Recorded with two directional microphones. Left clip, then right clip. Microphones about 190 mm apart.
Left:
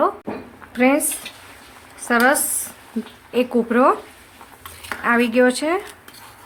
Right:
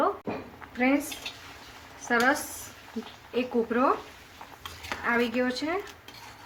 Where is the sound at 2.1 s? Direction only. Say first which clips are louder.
Left 8 dB; 60° left (ahead or behind).